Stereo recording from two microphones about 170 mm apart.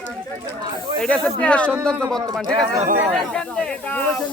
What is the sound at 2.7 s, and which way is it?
Speech, 45° right (ahead or behind).